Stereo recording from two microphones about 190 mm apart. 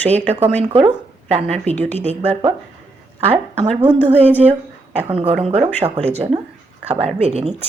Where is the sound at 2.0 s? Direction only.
35° right (ahead or behind).